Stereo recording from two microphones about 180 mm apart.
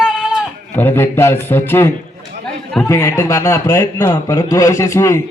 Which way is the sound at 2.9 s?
15° left (ahead or behind).